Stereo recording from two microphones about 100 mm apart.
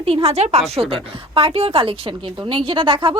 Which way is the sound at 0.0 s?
75° right (ahead or behind).